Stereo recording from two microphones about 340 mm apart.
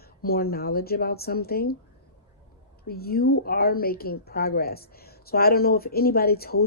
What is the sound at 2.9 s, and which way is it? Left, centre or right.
A woman's voice, left.